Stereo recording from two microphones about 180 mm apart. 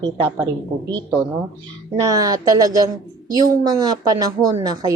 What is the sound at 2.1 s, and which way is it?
A woman's voice, 20° right (ahead or behind).